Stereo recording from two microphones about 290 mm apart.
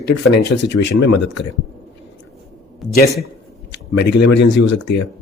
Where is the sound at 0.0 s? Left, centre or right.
Left.